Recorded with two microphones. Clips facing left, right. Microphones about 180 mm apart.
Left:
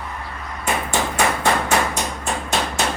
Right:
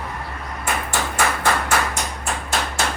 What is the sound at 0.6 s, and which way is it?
Hammer, 20° left (ahead or behind).